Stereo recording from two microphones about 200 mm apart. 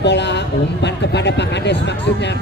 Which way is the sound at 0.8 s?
60° left (ahead or behind).